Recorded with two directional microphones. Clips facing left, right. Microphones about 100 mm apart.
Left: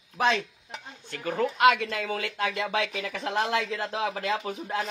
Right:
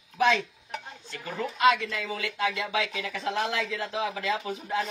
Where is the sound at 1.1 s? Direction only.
55° left (ahead or behind).